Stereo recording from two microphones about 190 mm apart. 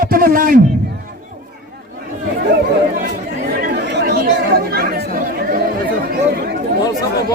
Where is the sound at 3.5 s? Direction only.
55° right (ahead or behind).